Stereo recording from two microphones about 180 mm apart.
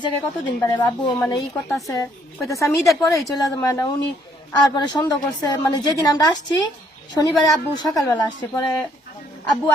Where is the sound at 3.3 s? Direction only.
20° left (ahead or behind).